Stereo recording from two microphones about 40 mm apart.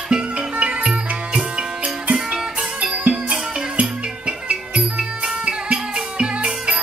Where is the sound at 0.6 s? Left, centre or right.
Right.